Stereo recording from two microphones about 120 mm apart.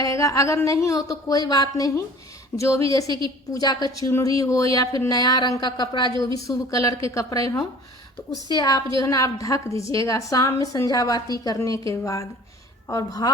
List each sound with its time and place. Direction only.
0.0 s a woman's voice: 30° left (ahead or behind)
8.4 s a woman's voice: 30° left (ahead or behind)